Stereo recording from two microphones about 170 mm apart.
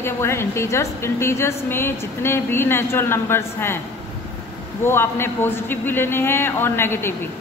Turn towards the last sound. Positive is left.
turn(degrees=15)  # may be behind; listen again after turning